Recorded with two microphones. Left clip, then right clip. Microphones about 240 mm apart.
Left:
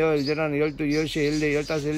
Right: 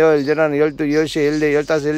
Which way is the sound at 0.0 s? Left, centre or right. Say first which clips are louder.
Right 9 dB; centre.